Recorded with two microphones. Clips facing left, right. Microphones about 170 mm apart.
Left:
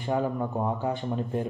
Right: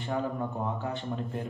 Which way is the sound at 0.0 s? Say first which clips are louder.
Left 4 dB; 20° left (ahead or behind).